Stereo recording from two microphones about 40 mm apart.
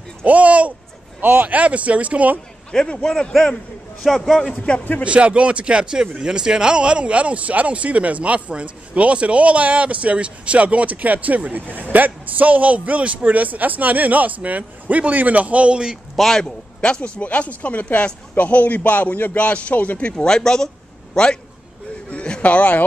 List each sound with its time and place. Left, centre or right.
0.2 s speech: right
1.2 s speech: right
3.0 s speech: centre
4.0 s a man's voice: centre
4.5 s speech: left
5.0 s speech: right
16.2 s a man's voice: centre
16.8 s a man's voice: left
19.4 s speech: left
19.7 s a man's voice: left
20.0 s speech: left
20.2 s a man's voice: centre
22.1 s a sound: left
22.4 s speech: left